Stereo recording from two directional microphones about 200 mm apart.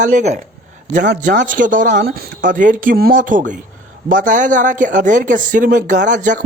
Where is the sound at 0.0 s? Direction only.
40° right (ahead or behind).